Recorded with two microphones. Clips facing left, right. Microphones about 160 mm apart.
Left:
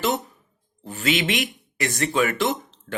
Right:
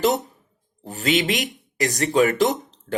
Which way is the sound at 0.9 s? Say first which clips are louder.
Right 2 dB; 35° right (ahead or behind).